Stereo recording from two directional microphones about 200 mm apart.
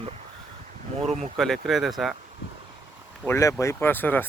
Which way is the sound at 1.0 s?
Centre (ahead or behind).